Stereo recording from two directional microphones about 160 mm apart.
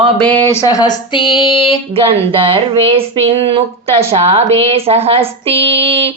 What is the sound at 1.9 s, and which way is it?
Speech, 35° right (ahead or behind).